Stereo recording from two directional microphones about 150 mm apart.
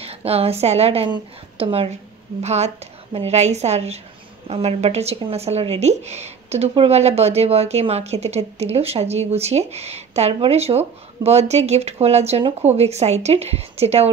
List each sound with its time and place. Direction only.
0.0 s a woman's voice: 40° right (ahead or behind)